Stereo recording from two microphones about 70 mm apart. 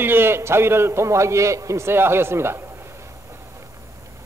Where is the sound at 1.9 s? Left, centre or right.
Right.